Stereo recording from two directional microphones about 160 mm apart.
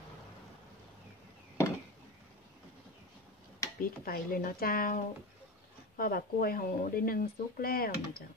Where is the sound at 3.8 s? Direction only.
60° left (ahead or behind).